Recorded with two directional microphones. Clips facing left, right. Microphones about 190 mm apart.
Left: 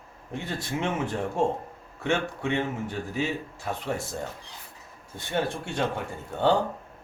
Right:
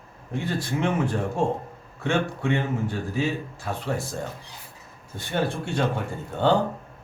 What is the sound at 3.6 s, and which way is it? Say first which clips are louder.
Speech: right 2 dB; 20° left (ahead or behind).